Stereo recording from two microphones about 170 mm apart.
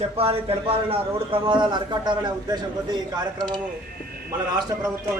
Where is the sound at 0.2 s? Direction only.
35° right (ahead or behind).